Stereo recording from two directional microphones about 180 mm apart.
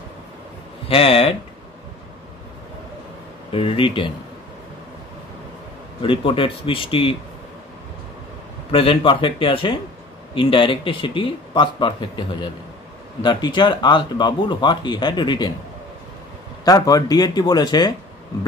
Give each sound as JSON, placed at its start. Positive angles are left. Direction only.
{"t": 0.8, "sound": "speech", "side_deg": 30}
{"t": 3.5, "sound": "speech", "side_deg": 30}
{"t": 6.0, "sound": "speech", "side_deg": 30}
{"t": 8.7, "sound": "speech", "side_deg": 30}
{"t": 16.6, "sound": "speech", "side_deg": 20}